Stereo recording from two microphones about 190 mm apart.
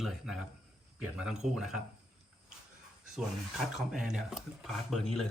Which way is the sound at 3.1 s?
Centre (ahead or behind).